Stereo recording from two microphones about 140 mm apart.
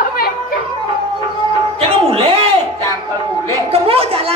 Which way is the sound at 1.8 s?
40° right (ahead or behind).